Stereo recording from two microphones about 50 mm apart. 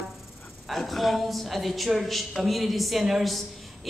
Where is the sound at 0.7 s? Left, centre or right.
Centre.